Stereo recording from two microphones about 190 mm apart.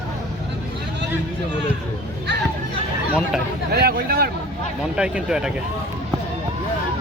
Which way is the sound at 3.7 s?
55° right (ahead or behind).